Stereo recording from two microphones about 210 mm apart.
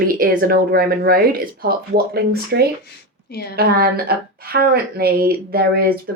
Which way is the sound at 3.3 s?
50° left (ahead or behind).